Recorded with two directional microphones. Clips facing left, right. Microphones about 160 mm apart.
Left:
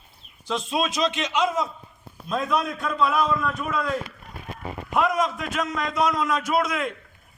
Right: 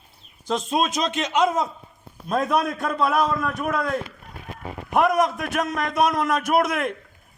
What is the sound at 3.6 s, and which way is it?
Speech, 65° right (ahead or behind).